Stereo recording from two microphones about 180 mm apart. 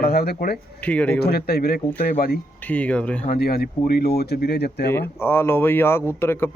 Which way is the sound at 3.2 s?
55° left (ahead or behind).